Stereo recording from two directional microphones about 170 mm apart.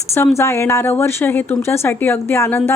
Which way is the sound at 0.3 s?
15° left (ahead or behind).